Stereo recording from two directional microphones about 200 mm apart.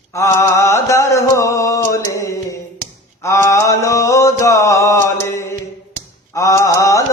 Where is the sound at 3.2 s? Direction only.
15° left (ahead or behind).